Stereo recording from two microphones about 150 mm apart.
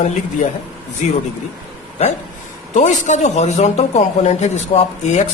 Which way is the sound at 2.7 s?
55° left (ahead or behind).